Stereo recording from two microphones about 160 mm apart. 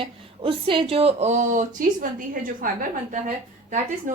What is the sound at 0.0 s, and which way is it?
Speech, 35° right (ahead or behind).